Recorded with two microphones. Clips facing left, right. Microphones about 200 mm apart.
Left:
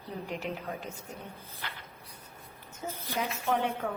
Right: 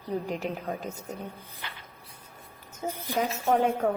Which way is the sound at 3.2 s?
40° right (ahead or behind).